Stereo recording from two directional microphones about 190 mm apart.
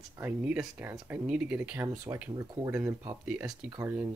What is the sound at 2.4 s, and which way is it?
Speech, 20° right (ahead or behind).